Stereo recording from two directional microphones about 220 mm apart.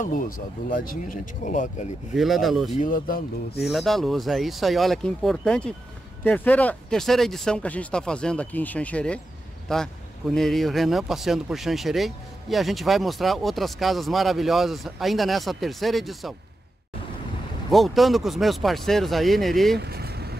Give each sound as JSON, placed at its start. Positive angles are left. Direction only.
{"t": 0.0, "sound": "speech", "side_deg": 35}
{"t": 2.1, "sound": "speech", "side_deg": 0}
{"t": 2.7, "sound": "speech", "side_deg": 35}
{"t": 3.6, "sound": "speech", "side_deg": 0}
{"t": 17.6, "sound": "speech", "side_deg": 0}
{"t": 19.8, "sound": "vehicle", "side_deg": -45}